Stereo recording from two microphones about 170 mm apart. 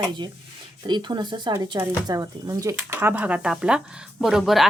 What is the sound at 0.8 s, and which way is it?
Speech, 25° right (ahead or behind).